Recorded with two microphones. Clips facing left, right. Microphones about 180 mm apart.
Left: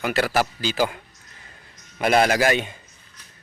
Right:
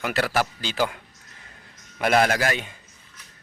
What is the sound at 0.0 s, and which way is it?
Speech, 5° left (ahead or behind).